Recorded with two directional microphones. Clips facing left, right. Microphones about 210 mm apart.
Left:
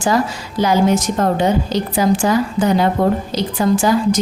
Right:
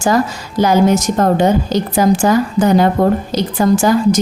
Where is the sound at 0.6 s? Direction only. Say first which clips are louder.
Right 3 dB; 45° right (ahead or behind).